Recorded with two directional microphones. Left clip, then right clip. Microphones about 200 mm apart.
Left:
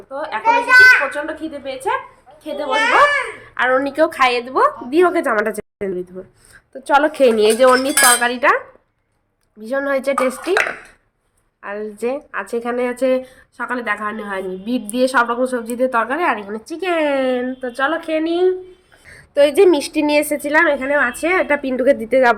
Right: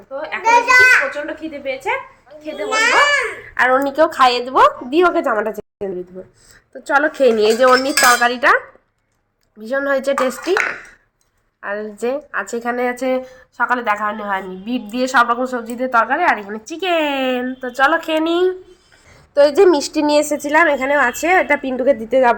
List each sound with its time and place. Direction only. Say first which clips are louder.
0.1 s a woman's voice: right 2 dB; 10° left (ahead or behind)
2.7 s a child's voice: even; 55° right (ahead or behind)
3.5 s a woman's voice: right 2 dB; 5° right (ahead or behind)
11.6 s a woman's voice: right 1 dB; centre (ahead or behind)
21.6 s a woman's voice: left 1 dB; 10° left (ahead or behind)